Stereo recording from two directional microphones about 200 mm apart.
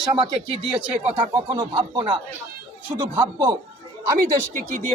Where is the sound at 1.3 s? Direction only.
25° right (ahead or behind).